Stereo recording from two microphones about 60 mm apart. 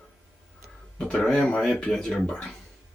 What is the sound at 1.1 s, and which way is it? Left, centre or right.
Speech, centre.